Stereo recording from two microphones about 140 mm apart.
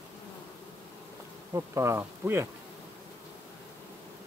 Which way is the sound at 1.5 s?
20° right (ahead or behind).